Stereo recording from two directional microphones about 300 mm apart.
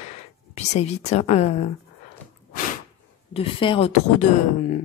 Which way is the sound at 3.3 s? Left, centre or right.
Centre.